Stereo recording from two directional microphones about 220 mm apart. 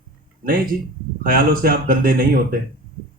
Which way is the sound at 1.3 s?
40° right (ahead or behind).